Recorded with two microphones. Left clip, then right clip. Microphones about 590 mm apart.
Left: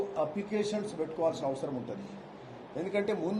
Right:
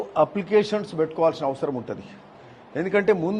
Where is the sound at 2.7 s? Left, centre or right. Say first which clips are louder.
Right 11 dB; right.